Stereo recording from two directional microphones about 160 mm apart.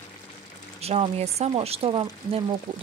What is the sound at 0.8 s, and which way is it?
Speech, 40° right (ahead or behind).